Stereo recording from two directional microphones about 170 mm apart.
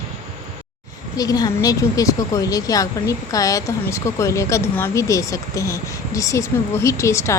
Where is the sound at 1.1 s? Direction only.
20° left (ahead or behind).